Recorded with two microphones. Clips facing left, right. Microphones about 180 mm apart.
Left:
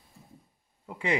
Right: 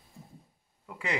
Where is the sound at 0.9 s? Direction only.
25° left (ahead or behind).